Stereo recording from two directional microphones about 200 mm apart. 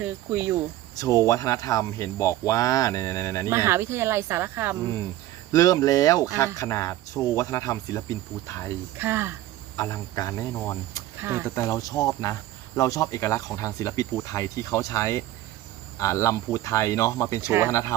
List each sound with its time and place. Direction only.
0.0 s speech: 10° right (ahead or behind)
0.9 s cricket: 15° left (ahead or behind)
3.5 s speech: 10° right (ahead or behind)
5.5 s cricket: 15° left (ahead or behind)
9.0 s speech: 10° right (ahead or behind)
9.7 s cricket: 15° left (ahead or behind)
11.2 s speech: 10° right (ahead or behind)
11.4 s cricket: 15° left (ahead or behind)